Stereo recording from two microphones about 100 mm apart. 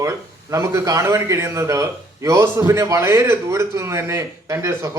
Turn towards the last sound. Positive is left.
turn(degrees=-30)  # may be behind; listen again after turning